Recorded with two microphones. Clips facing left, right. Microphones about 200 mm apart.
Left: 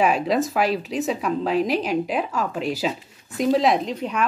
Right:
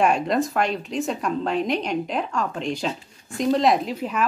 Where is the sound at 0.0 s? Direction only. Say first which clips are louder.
Even; centre (ahead or behind).